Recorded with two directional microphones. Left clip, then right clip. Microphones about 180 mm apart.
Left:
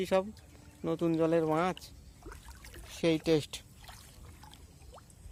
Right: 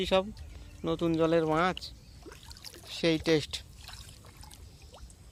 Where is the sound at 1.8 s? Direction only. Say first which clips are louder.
Right 6 dB; 15° left (ahead or behind).